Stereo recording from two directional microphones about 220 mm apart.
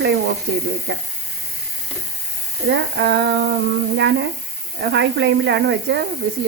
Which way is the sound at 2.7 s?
50° right (ahead or behind).